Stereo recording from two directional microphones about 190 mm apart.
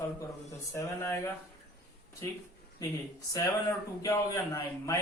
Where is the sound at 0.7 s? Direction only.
15° left (ahead or behind).